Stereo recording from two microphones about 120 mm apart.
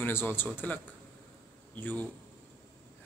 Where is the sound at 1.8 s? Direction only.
15° left (ahead or behind).